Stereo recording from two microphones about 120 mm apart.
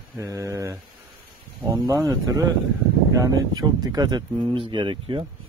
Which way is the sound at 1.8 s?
25° right (ahead or behind).